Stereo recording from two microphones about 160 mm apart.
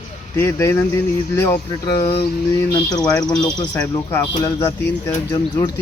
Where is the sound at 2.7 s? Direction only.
25° left (ahead or behind).